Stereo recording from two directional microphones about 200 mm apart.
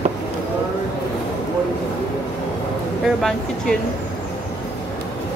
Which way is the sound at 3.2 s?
Centre (ahead or behind).